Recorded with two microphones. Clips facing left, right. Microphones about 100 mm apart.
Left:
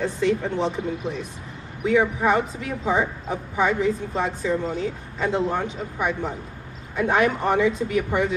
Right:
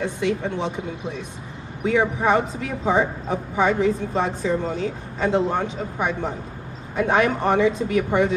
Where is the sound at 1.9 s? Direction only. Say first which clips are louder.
Even; 25° right (ahead or behind).